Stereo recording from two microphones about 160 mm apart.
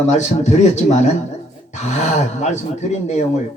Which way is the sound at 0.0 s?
45° left (ahead or behind).